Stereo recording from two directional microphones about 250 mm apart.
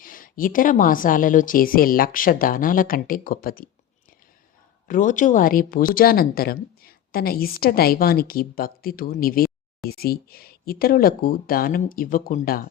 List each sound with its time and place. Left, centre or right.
0.0 s speech: left
4.9 s speech: left